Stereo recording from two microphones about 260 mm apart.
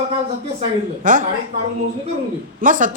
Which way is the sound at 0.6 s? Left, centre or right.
Right.